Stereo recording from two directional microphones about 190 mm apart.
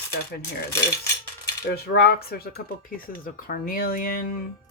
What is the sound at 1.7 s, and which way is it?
Speech, 55° left (ahead or behind).